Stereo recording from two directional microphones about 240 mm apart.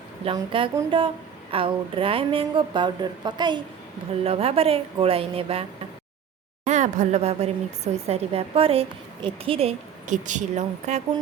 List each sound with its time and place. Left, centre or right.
0.3 s a woman's voice: right
6.7 s a woman's voice: right